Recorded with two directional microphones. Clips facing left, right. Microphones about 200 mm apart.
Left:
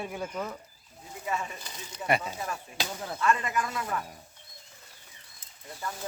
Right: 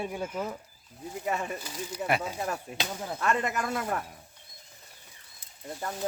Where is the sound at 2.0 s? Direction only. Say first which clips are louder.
Left 1 dB; centre (ahead or behind).